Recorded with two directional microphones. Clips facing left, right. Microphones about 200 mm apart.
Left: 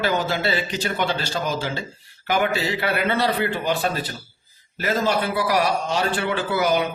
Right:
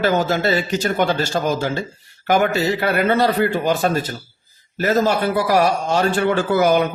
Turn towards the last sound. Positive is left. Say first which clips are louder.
# right 5 dB
turn(degrees=-50)  # may be behind; listen again after turning